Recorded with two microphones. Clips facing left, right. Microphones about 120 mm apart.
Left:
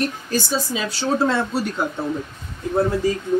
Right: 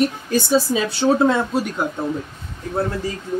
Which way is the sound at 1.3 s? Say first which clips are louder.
Right 2 dB; 10° right (ahead or behind).